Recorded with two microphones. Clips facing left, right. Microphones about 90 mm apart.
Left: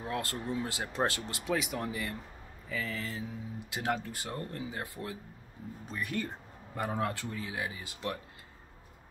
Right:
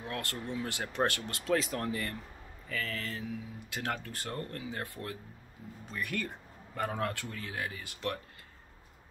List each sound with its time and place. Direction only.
0.0 s speech: 25° left (ahead or behind)
1.5 s speech: 10° left (ahead or behind)